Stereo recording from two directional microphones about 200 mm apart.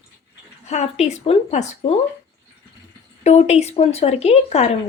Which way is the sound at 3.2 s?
35° left (ahead or behind).